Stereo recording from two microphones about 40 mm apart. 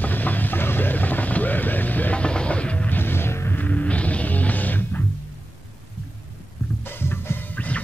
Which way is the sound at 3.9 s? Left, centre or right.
Left.